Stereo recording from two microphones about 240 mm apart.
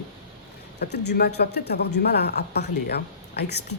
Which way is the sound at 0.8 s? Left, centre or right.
Left.